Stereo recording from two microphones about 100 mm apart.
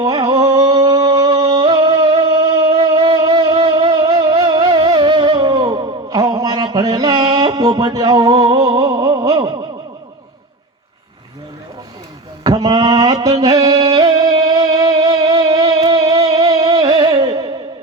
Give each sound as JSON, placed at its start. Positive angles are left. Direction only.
{"t": 0.0, "sound": "music", "side_deg": -45}
{"t": 7.9, "sound": "a sound", "side_deg": -40}
{"t": 12.4, "sound": "music", "side_deg": -45}